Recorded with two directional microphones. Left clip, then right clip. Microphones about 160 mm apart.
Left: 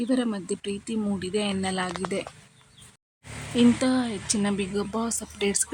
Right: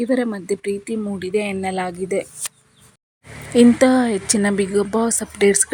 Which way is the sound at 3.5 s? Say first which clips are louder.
Right 10 dB; 40° right (ahead or behind).